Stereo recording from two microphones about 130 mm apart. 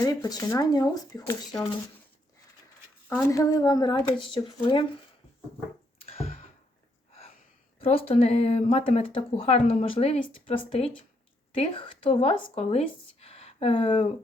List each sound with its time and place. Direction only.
0.0 s speech: 30° left (ahead or behind)
3.1 s speech: 25° left (ahead or behind); by 4.9 s 40° left (ahead or behind)
6.1 s a sound: 55° left (ahead or behind)
7.8 s speech: 45° left (ahead or behind)